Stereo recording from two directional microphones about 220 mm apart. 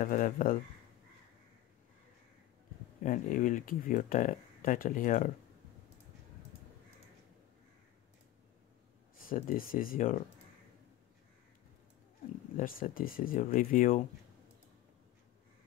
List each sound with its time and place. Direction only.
0.0 s speech: 35° left (ahead or behind)
3.1 s speech: 35° left (ahead or behind)
9.3 s speech: 40° left (ahead or behind)
12.5 s speech: 40° left (ahead or behind)